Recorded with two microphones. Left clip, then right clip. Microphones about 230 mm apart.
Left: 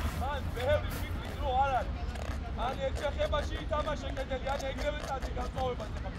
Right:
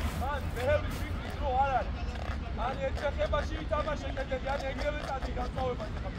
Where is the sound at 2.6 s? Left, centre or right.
Left.